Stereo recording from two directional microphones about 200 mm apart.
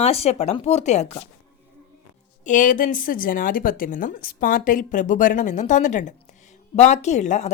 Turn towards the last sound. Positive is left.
turn(degrees=35)  # may be behind; listen again after turning